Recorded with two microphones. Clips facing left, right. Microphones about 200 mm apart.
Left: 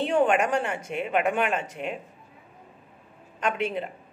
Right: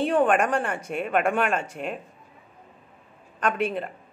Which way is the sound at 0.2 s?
20° left (ahead or behind).